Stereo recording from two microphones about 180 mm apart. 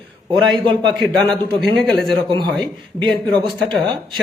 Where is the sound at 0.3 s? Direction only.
25° right (ahead or behind).